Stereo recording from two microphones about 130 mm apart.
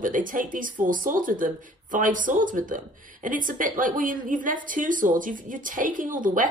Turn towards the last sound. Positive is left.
turn(degrees=-90)